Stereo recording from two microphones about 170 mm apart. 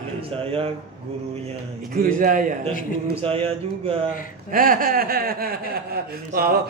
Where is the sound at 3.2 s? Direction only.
35° right (ahead or behind).